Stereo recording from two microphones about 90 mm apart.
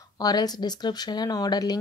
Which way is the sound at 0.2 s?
45° left (ahead or behind).